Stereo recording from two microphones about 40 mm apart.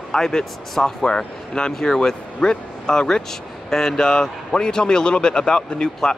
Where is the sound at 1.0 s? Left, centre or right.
Left.